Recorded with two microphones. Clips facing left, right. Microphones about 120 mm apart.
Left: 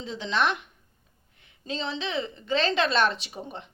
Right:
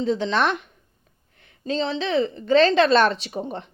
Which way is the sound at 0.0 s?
40° right (ahead or behind).